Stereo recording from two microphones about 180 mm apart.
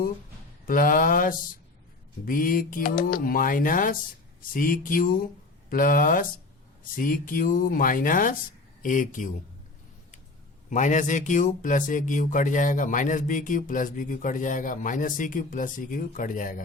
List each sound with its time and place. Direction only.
0.7 s speech: 50° left (ahead or behind)
10.7 s speech: 45° left (ahead or behind)